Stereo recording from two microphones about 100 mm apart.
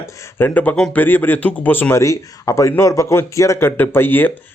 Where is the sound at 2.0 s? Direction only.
30° left (ahead or behind).